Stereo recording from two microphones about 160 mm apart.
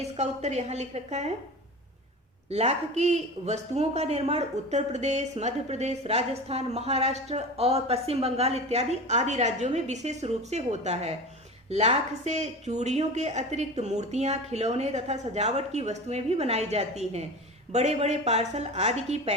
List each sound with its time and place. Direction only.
0.0 s speech: 45° right (ahead or behind)
2.5 s speech: 40° right (ahead or behind)